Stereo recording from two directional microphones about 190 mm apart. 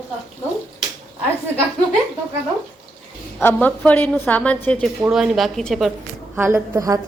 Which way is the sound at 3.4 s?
10° left (ahead or behind).